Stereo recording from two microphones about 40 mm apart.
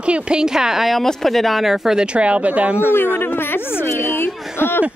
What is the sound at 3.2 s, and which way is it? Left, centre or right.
A woman's voice, left.